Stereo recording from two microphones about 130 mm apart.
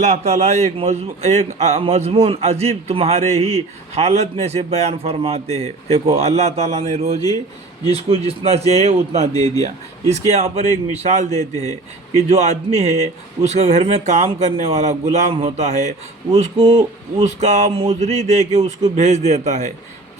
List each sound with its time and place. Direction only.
0.0 s a man's voice: 60° right (ahead or behind)
9.3 s speech: 30° left (ahead or behind)
9.6 s a man's voice: 55° right (ahead or behind)
11.3 s speech: 25° left (ahead or behind)
12.3 s a man's voice: 55° right (ahead or behind)